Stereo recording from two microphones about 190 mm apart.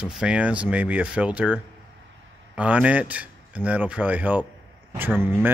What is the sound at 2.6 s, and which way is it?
Speech, 5° right (ahead or behind).